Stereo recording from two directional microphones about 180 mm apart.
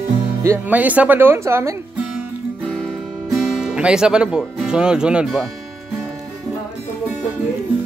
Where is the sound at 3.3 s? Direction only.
Centre (ahead or behind).